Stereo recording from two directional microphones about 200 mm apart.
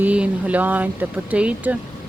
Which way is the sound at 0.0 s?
5° right (ahead or behind).